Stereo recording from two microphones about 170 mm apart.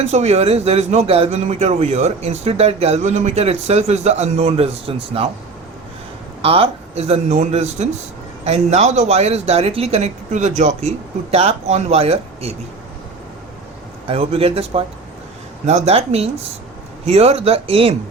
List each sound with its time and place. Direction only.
0.0 s a man's voice: 40° right (ahead or behind)
6.4 s a man's voice: 35° right (ahead or behind)
14.1 s a man's voice: 35° right (ahead or behind)